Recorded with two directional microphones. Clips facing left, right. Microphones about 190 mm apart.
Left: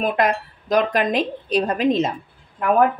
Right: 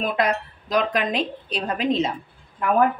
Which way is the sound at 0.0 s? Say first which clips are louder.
Left 3 dB; 45° left (ahead or behind).